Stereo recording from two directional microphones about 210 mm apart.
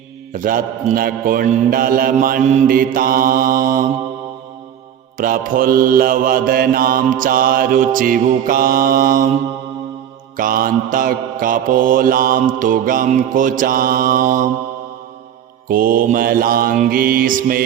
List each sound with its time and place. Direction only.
0.3 s mantra: 40° right (ahead or behind)
5.1 s mantra: 45° right (ahead or behind)
10.3 s mantra: 40° right (ahead or behind)
15.7 s mantra: 45° right (ahead or behind)